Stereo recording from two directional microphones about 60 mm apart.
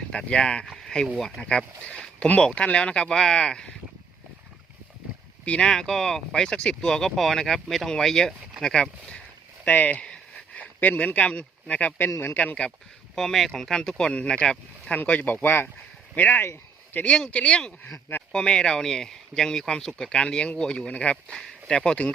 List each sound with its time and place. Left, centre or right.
0.1 s speech: centre
0.6 s a sound: centre
1.4 s speech: centre
5.5 s speech: centre
9.6 s speech: left
12.2 s speech: left
13.1 s speech: centre
14.9 s speech: left